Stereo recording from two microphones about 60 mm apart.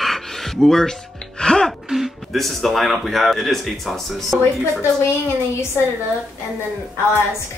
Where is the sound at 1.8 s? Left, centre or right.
Centre.